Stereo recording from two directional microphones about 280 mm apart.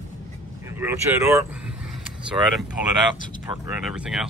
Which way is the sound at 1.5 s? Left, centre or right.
Centre.